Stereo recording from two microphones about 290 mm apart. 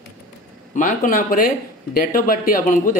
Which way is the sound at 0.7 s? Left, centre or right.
Left.